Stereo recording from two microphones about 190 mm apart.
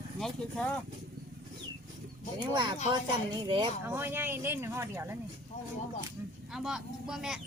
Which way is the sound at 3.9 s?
10° right (ahead or behind).